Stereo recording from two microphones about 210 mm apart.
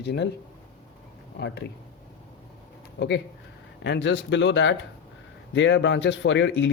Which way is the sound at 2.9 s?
55° left (ahead or behind).